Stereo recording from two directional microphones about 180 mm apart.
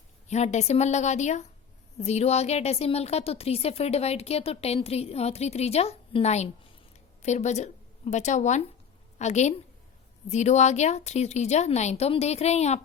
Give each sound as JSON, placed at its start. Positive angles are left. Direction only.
{"t": 0.3, "sound": "a woman's voice", "side_deg": 40}